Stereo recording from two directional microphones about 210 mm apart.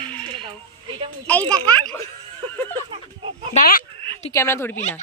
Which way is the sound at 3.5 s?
40° left (ahead or behind).